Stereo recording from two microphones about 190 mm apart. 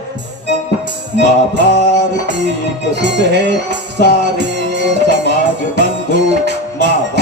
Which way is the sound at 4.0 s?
65° right (ahead or behind).